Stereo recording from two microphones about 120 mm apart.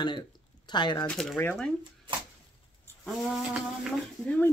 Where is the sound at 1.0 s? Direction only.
5° left (ahead or behind).